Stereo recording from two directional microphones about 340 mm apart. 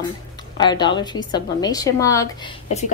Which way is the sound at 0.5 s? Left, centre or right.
Centre.